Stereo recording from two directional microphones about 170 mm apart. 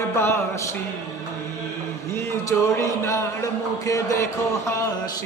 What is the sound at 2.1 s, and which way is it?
Speech, 15° left (ahead or behind).